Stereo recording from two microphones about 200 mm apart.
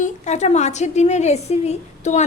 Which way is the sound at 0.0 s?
35° left (ahead or behind).